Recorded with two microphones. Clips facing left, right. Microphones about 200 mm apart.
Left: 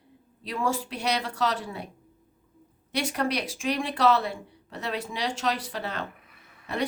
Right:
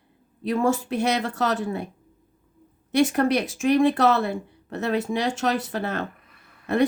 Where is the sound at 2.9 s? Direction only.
50° right (ahead or behind).